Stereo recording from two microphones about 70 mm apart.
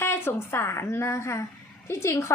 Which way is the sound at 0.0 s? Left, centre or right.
Left.